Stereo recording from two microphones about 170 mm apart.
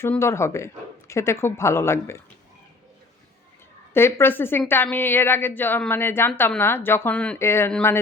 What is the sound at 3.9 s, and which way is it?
Speech, 15° left (ahead or behind).